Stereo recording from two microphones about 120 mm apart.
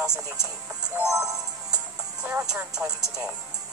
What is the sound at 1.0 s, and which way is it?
Music, 30° right (ahead or behind).